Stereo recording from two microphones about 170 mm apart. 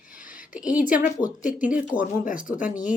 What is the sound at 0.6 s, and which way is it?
Speech, 5° right (ahead or behind).